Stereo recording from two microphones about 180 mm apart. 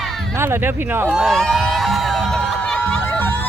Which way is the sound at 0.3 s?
15° right (ahead or behind).